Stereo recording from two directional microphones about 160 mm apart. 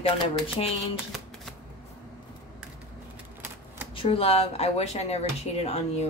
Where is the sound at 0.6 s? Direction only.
45° left (ahead or behind).